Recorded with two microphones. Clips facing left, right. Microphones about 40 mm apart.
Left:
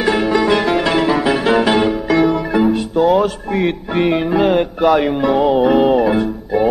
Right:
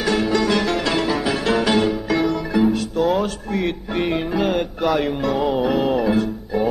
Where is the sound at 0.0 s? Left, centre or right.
Left.